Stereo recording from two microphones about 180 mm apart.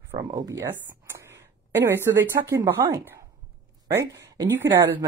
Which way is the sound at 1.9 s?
15° right (ahead or behind).